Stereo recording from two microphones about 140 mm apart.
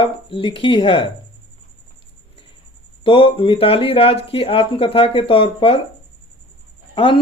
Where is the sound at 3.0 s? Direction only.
40° left (ahead or behind).